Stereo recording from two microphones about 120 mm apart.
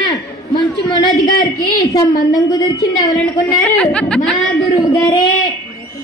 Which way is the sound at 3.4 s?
10° left (ahead or behind).